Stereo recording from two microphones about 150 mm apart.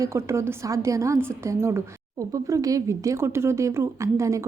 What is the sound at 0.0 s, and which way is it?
A woman's voice, 20° right (ahead or behind).